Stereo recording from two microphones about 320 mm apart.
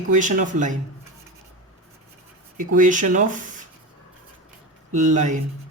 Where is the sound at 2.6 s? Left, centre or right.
Right.